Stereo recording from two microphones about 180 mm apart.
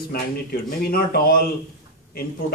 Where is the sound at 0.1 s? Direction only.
55° left (ahead or behind).